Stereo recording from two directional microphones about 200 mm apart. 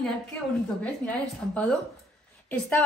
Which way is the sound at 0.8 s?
5° left (ahead or behind).